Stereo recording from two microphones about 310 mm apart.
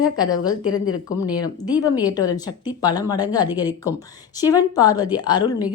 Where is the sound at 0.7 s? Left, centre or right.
Left.